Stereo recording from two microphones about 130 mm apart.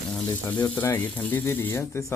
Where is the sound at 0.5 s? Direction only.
10° left (ahead or behind).